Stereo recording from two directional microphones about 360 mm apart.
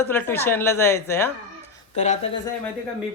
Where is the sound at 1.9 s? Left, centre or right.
Centre.